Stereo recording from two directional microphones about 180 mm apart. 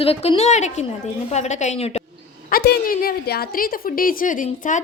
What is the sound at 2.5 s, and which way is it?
A woman's voice, 55° left (ahead or behind).